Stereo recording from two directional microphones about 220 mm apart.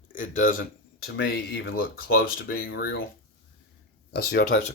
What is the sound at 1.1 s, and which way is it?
Speech, 45° left (ahead or behind).